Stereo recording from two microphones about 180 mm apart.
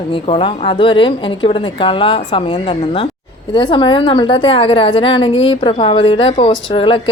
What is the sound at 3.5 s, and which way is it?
A woman's voice, 25° left (ahead or behind).